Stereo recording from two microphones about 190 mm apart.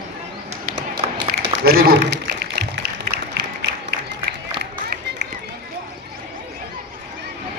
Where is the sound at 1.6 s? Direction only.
55° right (ahead or behind).